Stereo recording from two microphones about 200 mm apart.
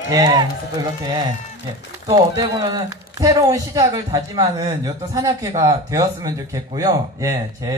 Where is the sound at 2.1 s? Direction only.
20° right (ahead or behind).